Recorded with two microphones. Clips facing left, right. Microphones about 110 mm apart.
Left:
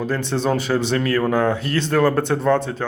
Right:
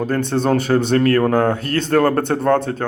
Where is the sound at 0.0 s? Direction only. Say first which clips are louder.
Right 3 dB; 50° right (ahead or behind).